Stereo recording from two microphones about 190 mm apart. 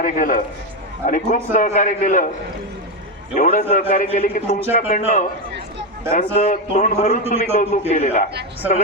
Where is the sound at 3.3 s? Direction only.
45° left (ahead or behind).